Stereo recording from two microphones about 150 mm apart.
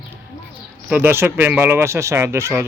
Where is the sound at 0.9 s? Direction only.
10° right (ahead or behind).